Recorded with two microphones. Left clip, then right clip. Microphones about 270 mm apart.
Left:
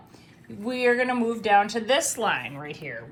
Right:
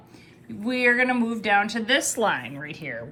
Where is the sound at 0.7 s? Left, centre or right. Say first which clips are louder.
Right 2 dB; centre.